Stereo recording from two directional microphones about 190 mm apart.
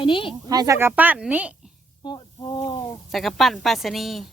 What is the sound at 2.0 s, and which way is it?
Snake, 25° left (ahead or behind).